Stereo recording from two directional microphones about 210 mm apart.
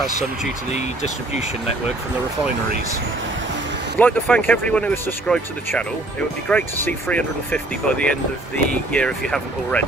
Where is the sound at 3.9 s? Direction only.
10° left (ahead or behind).